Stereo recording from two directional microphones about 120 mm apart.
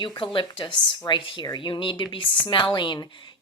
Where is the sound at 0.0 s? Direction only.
40° left (ahead or behind).